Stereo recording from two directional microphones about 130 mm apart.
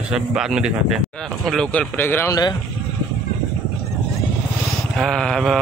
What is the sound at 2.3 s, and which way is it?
Speech, 30° left (ahead or behind).